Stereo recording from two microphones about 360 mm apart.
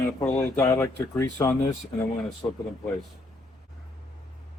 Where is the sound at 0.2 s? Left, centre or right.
Centre.